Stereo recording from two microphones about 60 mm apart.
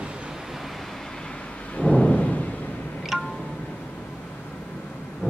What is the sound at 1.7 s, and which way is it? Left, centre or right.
Thunder, centre.